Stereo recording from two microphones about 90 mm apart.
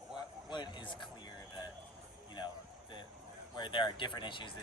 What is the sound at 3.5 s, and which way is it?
Speech, 65° left (ahead or behind).